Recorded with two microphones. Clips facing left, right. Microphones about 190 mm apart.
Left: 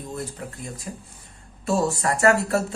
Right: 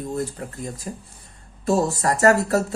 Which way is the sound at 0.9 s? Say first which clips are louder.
Right 3 dB; 35° right (ahead or behind).